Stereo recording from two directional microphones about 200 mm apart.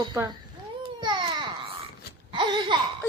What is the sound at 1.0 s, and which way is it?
Baby cry, 25° right (ahead or behind).